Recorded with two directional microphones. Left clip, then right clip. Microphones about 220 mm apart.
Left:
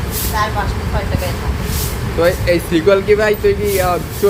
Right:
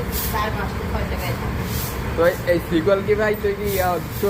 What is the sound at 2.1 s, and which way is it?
Speech, 30° left (ahead or behind).